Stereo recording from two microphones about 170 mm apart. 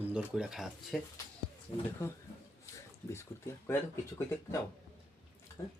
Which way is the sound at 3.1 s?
15° left (ahead or behind).